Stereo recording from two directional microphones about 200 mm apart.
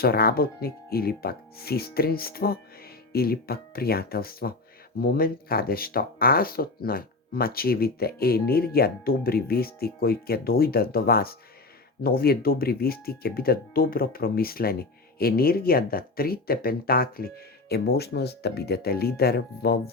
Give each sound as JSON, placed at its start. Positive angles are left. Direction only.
{"t": 0.0, "sound": "speech", "side_deg": 50}